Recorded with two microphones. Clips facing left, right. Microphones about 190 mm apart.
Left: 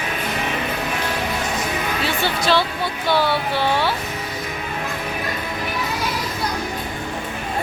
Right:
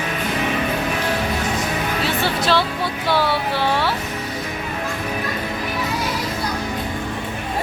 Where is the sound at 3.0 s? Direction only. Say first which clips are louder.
Left 1 dB; centre (ahead or behind).